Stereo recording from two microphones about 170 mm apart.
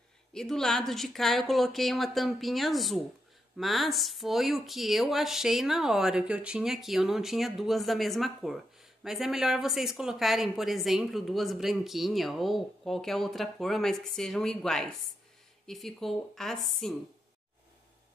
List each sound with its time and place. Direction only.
0.3 s speech: 5° left (ahead or behind)